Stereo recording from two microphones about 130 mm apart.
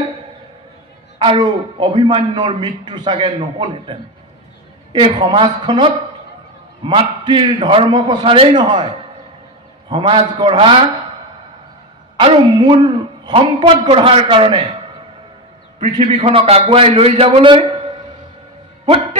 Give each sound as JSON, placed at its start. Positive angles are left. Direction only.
{"t": 1.2, "sound": "a man's voice", "side_deg": -35}
{"t": 9.8, "sound": "a man's voice", "side_deg": -40}
{"t": 12.2, "sound": "a man's voice", "side_deg": -40}
{"t": 16.0, "sound": "a man's voice", "side_deg": -50}